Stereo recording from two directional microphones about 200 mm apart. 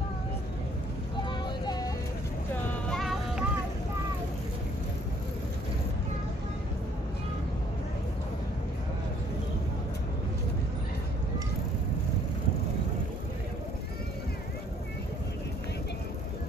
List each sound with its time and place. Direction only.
1.4 s vehicle: 20° left (ahead or behind)
2.9 s music: centre (ahead or behind)